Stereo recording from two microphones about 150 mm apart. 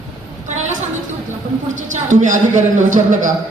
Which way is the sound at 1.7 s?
55° right (ahead or behind).